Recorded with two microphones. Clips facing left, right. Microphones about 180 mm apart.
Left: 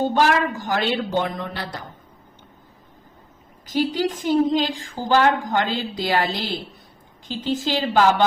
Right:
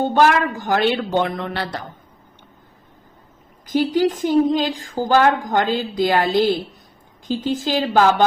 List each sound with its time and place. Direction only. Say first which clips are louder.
0.0 s speech: right 3 dB; 50° right (ahead or behind)
3.7 s a woman's voice: right 4 dB; 45° right (ahead or behind)